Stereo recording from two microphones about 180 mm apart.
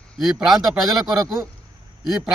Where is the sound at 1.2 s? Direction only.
15° right (ahead or behind).